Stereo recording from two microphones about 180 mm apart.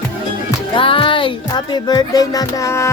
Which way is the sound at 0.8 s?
30° left (ahead or behind).